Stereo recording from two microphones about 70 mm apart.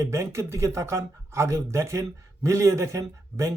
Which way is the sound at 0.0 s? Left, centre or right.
Right.